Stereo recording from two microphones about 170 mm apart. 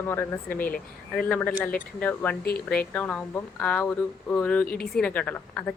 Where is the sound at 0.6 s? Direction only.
55° left (ahead or behind).